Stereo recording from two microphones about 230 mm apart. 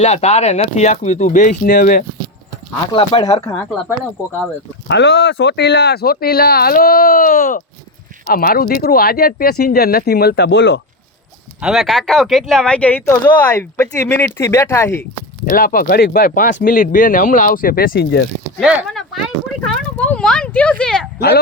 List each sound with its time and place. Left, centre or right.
0.0 s speech: left
2.9 s speech: left
4.9 s speech: left
11.6 s speech: centre
15.4 s speech: left
18.6 s speech: centre
19.6 s a sound: centre